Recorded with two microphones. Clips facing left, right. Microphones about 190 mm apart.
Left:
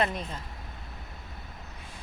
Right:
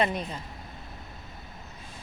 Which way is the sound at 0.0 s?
5° right (ahead or behind).